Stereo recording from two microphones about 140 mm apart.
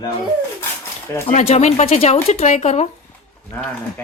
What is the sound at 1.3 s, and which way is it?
Speech, 55° left (ahead or behind).